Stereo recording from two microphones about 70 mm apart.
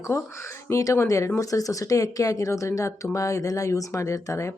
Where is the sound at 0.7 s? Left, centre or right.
Left.